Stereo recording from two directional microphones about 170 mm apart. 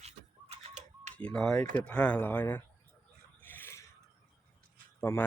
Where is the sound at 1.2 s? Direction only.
5° left (ahead or behind).